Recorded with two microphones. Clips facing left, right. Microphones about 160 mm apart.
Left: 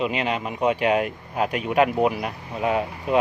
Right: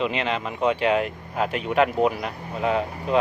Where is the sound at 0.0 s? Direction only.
10° left (ahead or behind).